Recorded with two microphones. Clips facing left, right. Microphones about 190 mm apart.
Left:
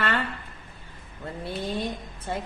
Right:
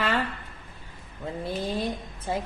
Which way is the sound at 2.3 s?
5° right (ahead or behind).